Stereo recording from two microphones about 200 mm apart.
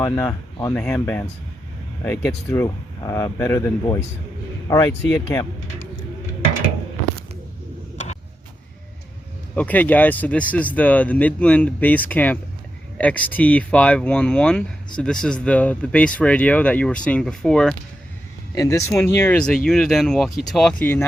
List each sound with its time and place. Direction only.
0.0 s speech: 15° left (ahead or behind)
9.6 s speech: 10° left (ahead or behind)
18.5 s speech: 15° left (ahead or behind)